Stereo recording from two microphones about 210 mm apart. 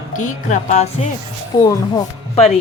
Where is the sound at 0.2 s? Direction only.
35° left (ahead or behind).